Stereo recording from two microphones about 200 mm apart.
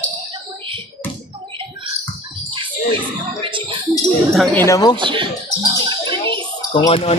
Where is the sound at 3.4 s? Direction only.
25° right (ahead or behind).